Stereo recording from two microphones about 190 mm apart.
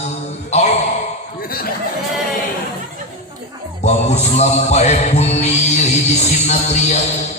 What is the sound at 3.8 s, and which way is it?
Mantra, 35° left (ahead or behind).